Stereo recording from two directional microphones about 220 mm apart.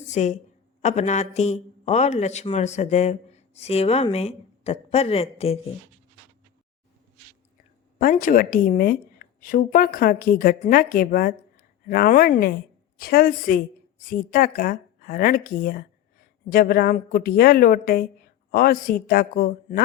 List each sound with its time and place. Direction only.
0.1 s a woman's voice: 30° left (ahead or behind)
7.9 s a woman's voice: 40° left (ahead or behind)